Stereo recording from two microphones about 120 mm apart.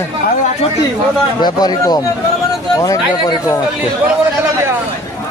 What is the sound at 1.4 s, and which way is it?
Speech, 35° left (ahead or behind).